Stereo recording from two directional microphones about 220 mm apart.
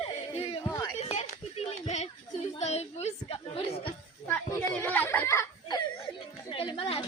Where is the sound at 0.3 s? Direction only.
30° left (ahead or behind).